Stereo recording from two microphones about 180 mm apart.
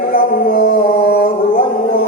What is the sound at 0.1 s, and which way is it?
Music, 50° left (ahead or behind).